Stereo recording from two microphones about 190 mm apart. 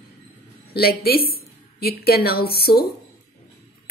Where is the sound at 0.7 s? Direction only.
55° left (ahead or behind).